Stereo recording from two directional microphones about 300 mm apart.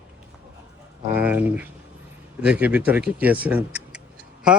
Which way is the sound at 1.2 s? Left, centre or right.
Centre.